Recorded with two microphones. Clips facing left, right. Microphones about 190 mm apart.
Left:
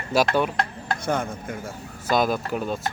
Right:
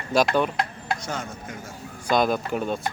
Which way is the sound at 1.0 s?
55° left (ahead or behind).